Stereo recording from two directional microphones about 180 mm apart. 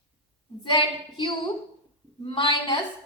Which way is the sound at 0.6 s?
25° left (ahead or behind).